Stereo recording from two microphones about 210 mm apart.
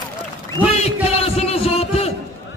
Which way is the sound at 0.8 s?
30° left (ahead or behind).